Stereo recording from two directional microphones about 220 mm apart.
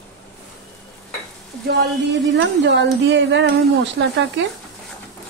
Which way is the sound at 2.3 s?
55° right (ahead or behind).